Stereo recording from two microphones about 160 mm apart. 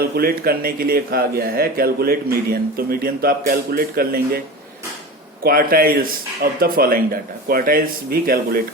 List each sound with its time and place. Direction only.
0.2 s speech: 70° right (ahead or behind)
5.4 s speech: 65° right (ahead or behind)